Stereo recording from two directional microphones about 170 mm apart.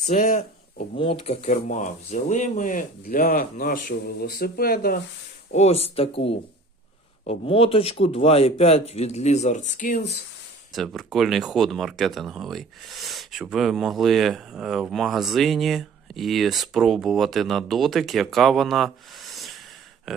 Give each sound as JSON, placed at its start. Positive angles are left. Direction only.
{"t": 0.0, "sound": "speech", "side_deg": 45}
{"t": 0.9, "sound": "speech", "side_deg": 30}
{"t": 5.5, "sound": "speech", "side_deg": 35}
{"t": 10.7, "sound": "speech", "side_deg": 0}